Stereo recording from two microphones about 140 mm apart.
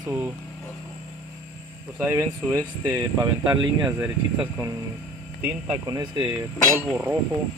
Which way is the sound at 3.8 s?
15° right (ahead or behind).